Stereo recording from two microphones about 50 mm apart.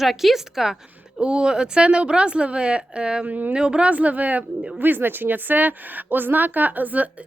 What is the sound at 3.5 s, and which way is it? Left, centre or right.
A woman's voice, centre.